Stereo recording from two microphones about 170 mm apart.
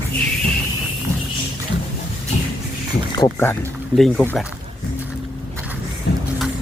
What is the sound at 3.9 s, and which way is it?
Speech, centre (ahead or behind).